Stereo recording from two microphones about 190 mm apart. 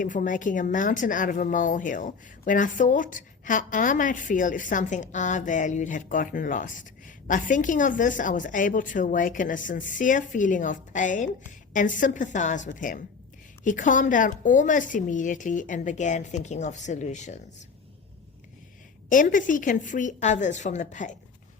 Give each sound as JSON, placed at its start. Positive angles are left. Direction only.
{"t": 0.0, "sound": "speech", "side_deg": 45}
{"t": 19.0, "sound": "a woman's voice", "side_deg": 45}